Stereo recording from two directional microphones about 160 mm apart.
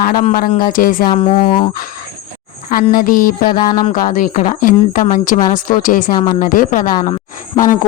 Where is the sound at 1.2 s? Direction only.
35° left (ahead or behind).